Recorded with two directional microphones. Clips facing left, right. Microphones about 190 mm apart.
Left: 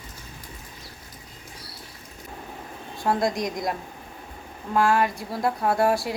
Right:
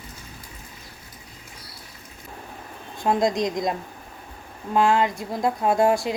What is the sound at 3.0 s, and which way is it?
A woman's voice, 20° right (ahead or behind).